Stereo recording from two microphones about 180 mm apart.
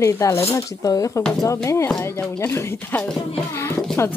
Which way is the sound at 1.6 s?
15° left (ahead or behind).